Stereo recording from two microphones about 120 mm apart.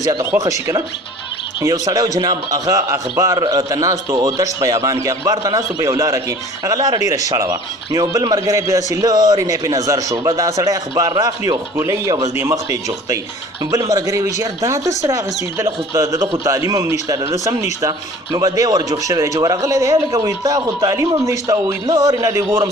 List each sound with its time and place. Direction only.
0.2 s a man's voice: 25° right (ahead or behind)